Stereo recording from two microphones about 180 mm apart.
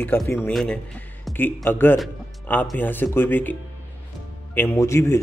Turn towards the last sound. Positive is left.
turn(degrees=15)  # may be behind; listen again after turning